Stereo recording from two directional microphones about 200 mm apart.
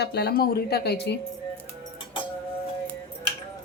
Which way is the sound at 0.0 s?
55° left (ahead or behind).